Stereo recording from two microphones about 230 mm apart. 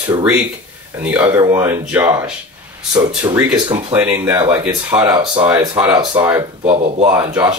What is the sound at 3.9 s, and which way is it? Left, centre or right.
Speech, centre.